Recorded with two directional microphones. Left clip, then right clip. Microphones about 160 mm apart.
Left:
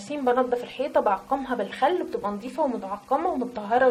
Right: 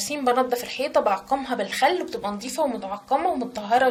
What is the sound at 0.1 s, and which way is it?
A woman's voice, 15° right (ahead or behind).